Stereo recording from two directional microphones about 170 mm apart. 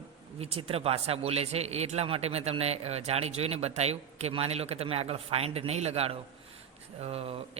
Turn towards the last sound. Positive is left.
turn(degrees=-35)  # may be behind; listen again after turning